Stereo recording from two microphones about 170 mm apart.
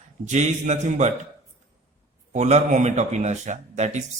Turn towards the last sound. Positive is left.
turn(degrees=-45)  # may be behind; listen again after turning